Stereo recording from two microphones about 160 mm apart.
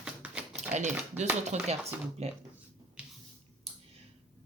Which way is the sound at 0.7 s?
45° right (ahead or behind).